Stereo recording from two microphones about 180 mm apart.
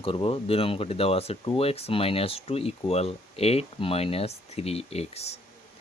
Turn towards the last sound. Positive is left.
turn(degrees=35)  # may be behind; listen again after turning